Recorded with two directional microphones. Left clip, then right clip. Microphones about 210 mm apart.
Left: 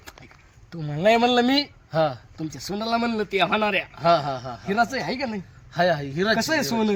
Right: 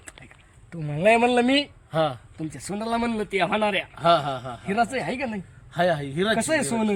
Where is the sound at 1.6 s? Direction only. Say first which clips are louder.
Left 1 dB; 5° left (ahead or behind).